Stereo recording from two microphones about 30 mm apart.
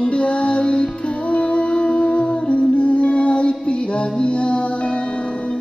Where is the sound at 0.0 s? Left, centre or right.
Left.